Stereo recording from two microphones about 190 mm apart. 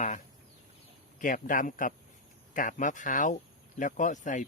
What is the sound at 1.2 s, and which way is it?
Speech, 45° left (ahead or behind).